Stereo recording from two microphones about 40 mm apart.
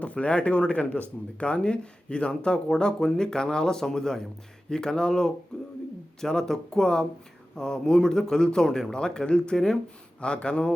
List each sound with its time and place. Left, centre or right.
0.0 s speech: left
5.5 s a sound: centre
6.1 s speech: centre